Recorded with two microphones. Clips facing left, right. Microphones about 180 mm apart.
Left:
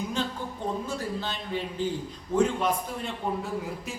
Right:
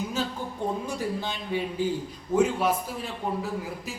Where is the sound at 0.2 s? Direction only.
5° right (ahead or behind).